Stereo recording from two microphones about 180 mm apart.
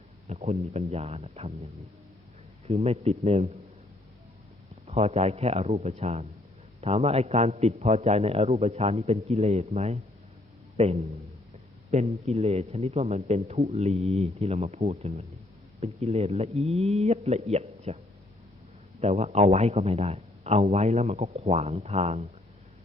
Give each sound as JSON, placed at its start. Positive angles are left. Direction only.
{"t": 0.3, "sound": "a man's voice", "side_deg": -40}
{"t": 2.6, "sound": "a man's voice", "side_deg": -35}
{"t": 4.9, "sound": "a man's voice", "side_deg": -35}
{"t": 11.9, "sound": "a man's voice", "side_deg": -40}